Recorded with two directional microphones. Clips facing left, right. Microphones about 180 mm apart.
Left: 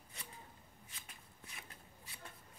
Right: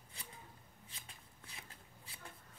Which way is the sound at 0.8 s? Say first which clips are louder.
Right 1 dB; 30° right (ahead or behind).